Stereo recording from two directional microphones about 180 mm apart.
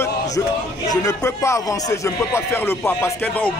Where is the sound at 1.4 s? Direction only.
15° left (ahead or behind).